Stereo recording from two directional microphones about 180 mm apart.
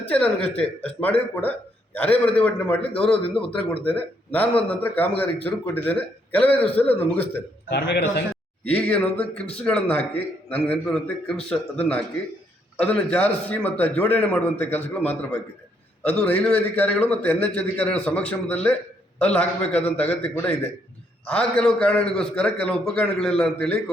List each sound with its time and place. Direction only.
0.1 s a man's voice: 5° left (ahead or behind)
2.4 s a man's voice: 10° left (ahead or behind)
7.7 s a man's voice: 65° left (ahead or behind)
8.6 s a man's voice: 5° left (ahead or behind)